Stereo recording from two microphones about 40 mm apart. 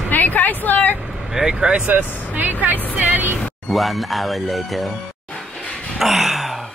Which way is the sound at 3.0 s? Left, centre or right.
Right.